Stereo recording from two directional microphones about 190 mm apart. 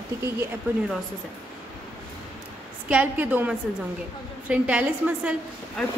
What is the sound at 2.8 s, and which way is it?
A woman's voice, 5° right (ahead or behind).